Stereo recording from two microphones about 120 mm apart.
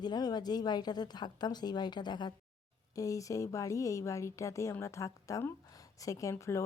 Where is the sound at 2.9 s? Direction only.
30° left (ahead or behind).